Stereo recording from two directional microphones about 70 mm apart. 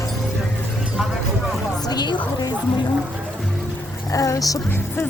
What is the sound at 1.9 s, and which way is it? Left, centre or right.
Speech, left.